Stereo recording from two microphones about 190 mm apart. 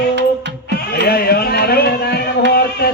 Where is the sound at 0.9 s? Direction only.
55° left (ahead or behind).